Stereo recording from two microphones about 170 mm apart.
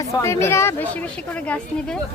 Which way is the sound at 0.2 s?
15° left (ahead or behind).